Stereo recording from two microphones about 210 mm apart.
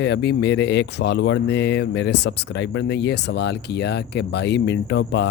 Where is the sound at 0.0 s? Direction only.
55° left (ahead or behind).